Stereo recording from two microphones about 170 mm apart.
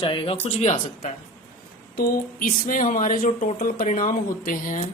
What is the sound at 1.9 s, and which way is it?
Speech, 60° left (ahead or behind).